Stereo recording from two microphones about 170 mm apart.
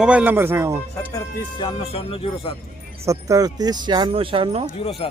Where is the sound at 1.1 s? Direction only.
25° left (ahead or behind).